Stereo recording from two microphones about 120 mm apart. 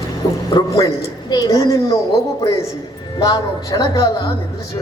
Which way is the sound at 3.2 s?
30° left (ahead or behind).